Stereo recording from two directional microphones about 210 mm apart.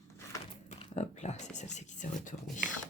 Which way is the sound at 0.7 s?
35° left (ahead or behind).